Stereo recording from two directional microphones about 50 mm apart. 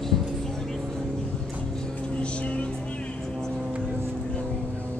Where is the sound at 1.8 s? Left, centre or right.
Left.